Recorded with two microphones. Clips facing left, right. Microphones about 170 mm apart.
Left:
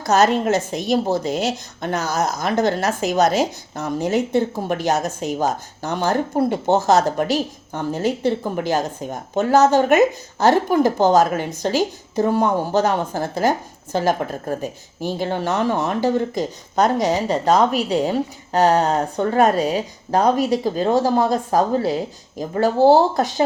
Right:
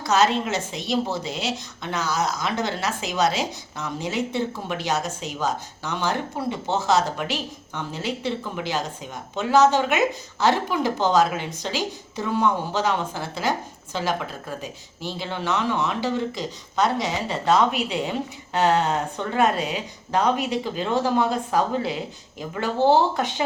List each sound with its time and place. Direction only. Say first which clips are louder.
0.0 s a woman's voice: left 4 dB; 45° left (ahead or behind)